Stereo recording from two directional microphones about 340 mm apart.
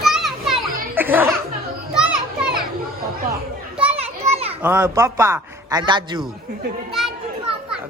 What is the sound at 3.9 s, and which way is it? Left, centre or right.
Children playing, centre.